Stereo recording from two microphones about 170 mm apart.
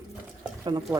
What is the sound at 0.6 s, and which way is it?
Speech, 25° right (ahead or behind).